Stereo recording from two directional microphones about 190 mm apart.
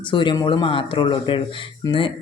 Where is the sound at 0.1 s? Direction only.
25° left (ahead or behind).